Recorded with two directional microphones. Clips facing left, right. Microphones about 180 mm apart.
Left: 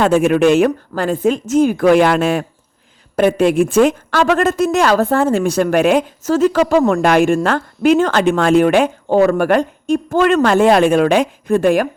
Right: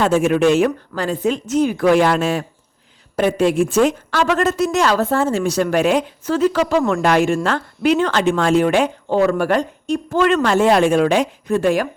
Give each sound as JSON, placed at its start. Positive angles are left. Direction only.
{"t": 0.0, "sound": "a woman's voice", "side_deg": 60}